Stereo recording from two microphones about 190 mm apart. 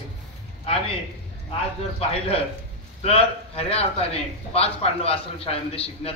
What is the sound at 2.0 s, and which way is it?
A man's voice, 30° left (ahead or behind).